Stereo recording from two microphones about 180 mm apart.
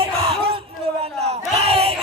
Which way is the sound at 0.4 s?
30° right (ahead or behind).